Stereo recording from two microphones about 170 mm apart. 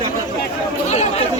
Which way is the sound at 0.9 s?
40° left (ahead or behind).